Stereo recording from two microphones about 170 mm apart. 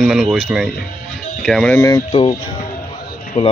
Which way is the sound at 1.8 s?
15° left (ahead or behind).